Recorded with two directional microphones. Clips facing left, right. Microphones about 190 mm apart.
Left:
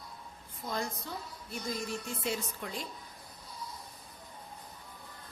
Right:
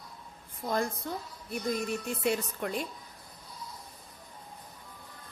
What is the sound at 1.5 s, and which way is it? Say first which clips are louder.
A woman's voice: right 5 dB; 60° right (ahead or behind).